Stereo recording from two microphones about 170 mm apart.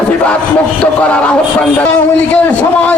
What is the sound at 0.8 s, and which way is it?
A man's voice, 5° left (ahead or behind).